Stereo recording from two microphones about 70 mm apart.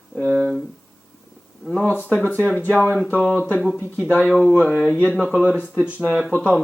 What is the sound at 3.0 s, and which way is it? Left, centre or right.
Speech, left.